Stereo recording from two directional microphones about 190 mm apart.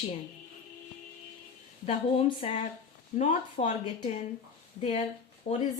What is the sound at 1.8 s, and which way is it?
Speech, 30° left (ahead or behind).